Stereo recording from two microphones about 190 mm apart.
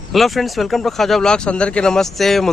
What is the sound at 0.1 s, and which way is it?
Speech, centre (ahead or behind).